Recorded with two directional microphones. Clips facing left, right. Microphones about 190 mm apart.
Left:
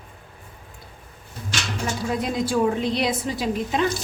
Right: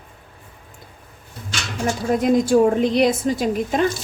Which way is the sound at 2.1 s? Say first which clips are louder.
Right 9 dB; 50° right (ahead or behind).